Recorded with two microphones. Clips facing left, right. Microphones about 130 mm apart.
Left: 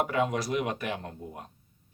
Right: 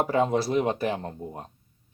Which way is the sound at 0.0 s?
30° right (ahead or behind).